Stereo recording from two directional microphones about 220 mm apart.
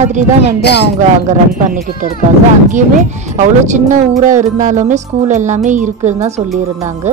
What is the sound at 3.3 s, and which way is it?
A woman's voice, 35° right (ahead or behind).